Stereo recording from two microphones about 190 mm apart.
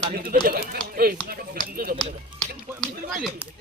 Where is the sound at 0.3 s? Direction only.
50° right (ahead or behind).